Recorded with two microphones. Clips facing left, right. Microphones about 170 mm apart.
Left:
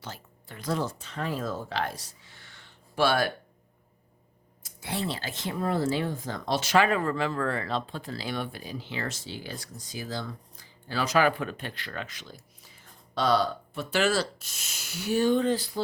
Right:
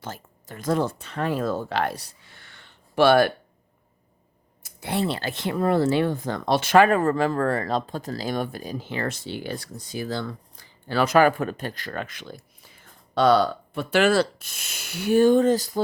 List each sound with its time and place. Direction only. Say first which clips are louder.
0.0 s speech: right 5 dB; 45° right (ahead or behind); by 3.3 s 60° right (ahead or behind)
4.8 s speech: right 6 dB; 60° right (ahead or behind); by 15.8 s 45° right (ahead or behind)